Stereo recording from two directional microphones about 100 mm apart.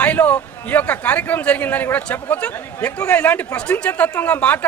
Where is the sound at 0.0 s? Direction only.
15° left (ahead or behind).